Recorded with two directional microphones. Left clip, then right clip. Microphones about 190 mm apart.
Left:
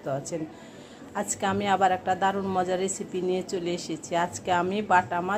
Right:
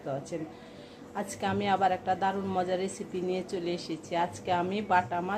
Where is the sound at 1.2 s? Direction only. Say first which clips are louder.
Left 4 dB; 15° left (ahead or behind).